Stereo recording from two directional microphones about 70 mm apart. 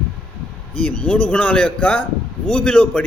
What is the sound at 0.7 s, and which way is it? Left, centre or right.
A man's voice, centre.